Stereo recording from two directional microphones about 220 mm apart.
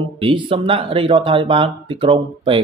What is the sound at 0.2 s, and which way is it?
Speech, 25° right (ahead or behind).